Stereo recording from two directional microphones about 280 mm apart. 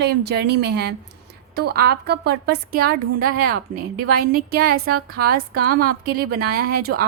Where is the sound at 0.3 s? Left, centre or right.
Right.